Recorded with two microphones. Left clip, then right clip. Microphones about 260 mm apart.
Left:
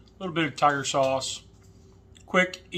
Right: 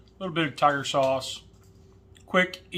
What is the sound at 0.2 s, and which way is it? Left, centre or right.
Speech, centre.